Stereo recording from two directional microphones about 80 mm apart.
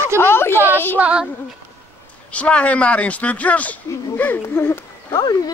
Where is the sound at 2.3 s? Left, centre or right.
Centre.